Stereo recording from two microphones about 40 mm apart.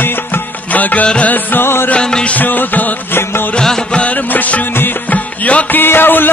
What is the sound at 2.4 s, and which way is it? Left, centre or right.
Music, left.